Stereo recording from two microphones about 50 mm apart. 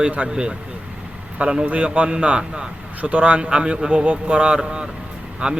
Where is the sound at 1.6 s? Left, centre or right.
Right.